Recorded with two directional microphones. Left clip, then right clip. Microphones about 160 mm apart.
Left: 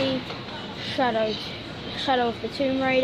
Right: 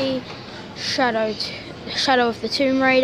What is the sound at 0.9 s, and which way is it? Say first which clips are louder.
A woman's voice: right 3 dB; 45° right (ahead or behind).